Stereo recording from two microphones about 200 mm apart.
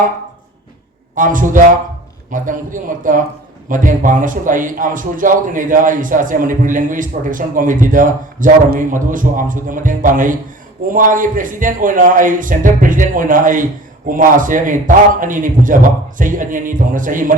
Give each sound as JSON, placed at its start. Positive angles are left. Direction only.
{"t": 1.1, "sound": "a man's voice", "side_deg": -40}